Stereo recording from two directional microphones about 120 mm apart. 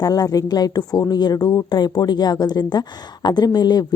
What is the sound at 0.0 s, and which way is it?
A woman's voice, 30° left (ahead or behind).